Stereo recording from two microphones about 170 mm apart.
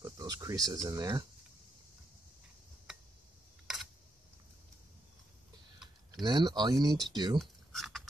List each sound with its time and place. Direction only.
0.0 s speech: 20° right (ahead or behind)
6.2 s speech: 25° right (ahead or behind)
7.3 s a sound: centre (ahead or behind)